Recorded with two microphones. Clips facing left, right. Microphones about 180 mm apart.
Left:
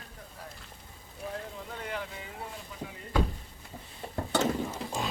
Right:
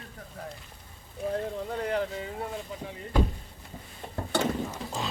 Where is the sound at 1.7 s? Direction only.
40° right (ahead or behind).